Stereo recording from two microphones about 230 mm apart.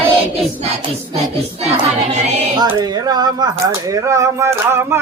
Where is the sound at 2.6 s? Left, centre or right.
Centre.